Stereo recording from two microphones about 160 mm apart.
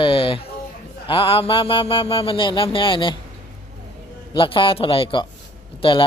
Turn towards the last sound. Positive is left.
turn(degrees=30)  # may be behind; listen again after turning